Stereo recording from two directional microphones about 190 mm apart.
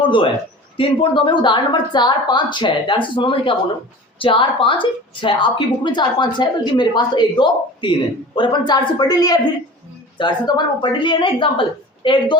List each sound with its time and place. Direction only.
0.0 s a man's voice: 25° left (ahead or behind)